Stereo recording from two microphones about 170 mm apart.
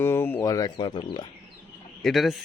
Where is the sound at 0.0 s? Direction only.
15° left (ahead or behind).